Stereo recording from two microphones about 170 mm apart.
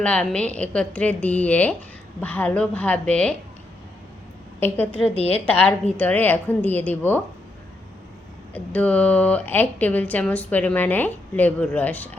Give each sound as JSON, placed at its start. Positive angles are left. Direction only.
{"t": 0.0, "sound": "speech", "side_deg": 5}
{"t": 4.6, "sound": "speech", "side_deg": 10}
{"t": 5.0, "sound": "a woman's voice", "side_deg": 35}
{"t": 6.0, "sound": "speech", "side_deg": 10}
{"t": 8.5, "sound": "speech", "side_deg": 10}